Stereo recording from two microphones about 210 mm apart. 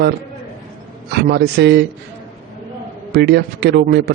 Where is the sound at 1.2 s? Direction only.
50° right (ahead or behind).